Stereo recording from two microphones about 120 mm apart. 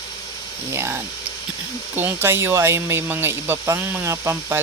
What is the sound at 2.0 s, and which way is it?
Speech, 15° right (ahead or behind).